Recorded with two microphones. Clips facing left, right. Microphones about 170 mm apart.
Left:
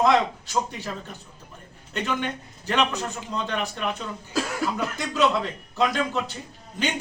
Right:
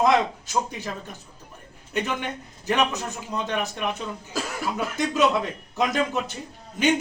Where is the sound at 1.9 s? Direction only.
15° right (ahead or behind).